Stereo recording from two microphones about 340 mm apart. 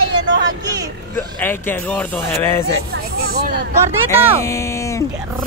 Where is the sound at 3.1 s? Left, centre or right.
Right.